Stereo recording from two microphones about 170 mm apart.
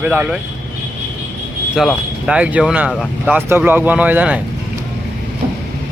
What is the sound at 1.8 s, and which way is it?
Speech, 5° right (ahead or behind).